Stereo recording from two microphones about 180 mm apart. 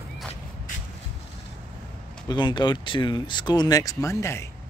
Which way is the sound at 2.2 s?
25° left (ahead or behind).